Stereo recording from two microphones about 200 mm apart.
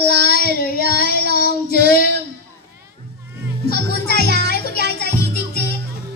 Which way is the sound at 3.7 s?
50° left (ahead or behind).